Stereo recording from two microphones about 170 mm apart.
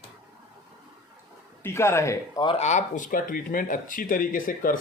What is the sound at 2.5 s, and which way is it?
Speech, 40° left (ahead or behind).